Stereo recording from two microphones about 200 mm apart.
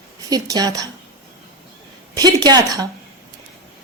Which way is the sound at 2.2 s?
20° right (ahead or behind).